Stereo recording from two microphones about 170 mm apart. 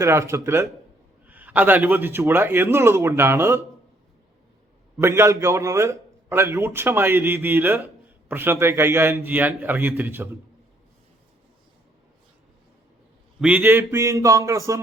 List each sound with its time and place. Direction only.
0.0 s a man's voice: 15° right (ahead or behind)
4.9 s a man's voice: 15° right (ahead or behind)
13.4 s a man's voice: 10° right (ahead or behind)